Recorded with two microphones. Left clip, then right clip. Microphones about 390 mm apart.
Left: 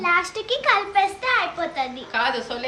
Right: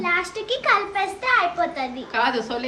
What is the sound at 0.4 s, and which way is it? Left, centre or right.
A child's voice, centre.